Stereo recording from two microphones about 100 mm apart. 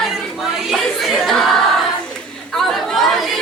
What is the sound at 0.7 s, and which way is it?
Crowd, centre (ahead or behind).